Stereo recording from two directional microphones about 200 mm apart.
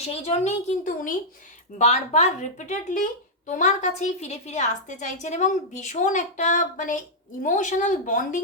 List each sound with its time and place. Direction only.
0.0 s speech: 30° left (ahead or behind)